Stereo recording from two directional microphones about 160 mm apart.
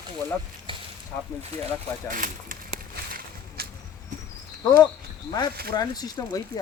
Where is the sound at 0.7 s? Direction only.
35° right (ahead or behind).